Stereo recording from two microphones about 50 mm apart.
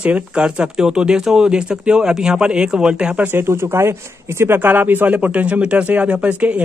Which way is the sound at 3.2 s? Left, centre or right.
Right.